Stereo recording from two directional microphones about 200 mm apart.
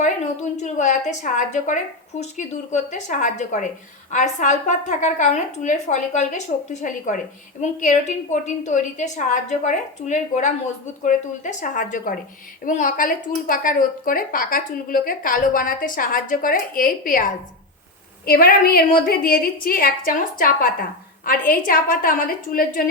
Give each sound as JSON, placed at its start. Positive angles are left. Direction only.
{"t": 0.5, "sound": "a woman's voice", "side_deg": 35}